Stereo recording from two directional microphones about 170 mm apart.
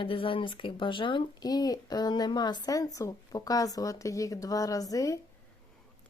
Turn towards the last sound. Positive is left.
turn(degrees=20)  # may be behind; listen again after turning